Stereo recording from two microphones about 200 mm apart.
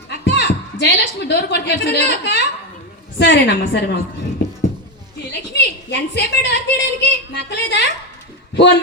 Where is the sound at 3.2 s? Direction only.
60° left (ahead or behind).